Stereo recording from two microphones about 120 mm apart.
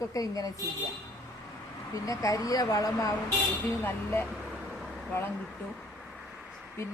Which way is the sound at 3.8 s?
15° left (ahead or behind).